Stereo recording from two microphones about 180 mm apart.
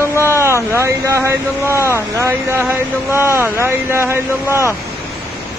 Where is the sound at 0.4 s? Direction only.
15° right (ahead or behind).